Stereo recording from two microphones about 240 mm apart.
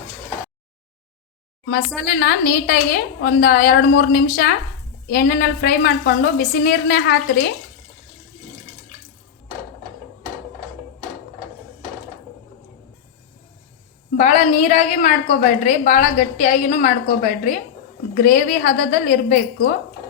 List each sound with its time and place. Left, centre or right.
2.0 s a woman's voice: left
14.2 s a woman's voice: left